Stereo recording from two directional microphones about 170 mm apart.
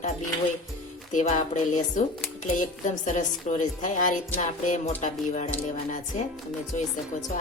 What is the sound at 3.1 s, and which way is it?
Speech, 45° left (ahead or behind).